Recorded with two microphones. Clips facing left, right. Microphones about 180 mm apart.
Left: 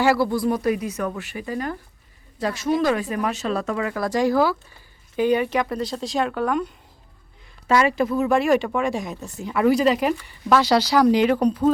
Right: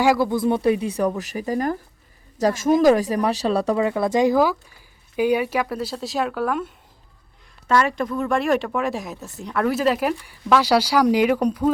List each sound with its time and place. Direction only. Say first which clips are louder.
0.0 s speech: right 1 dB; 15° right (ahead or behind)
7.7 s speech: left 1 dB; 5° left (ahead or behind)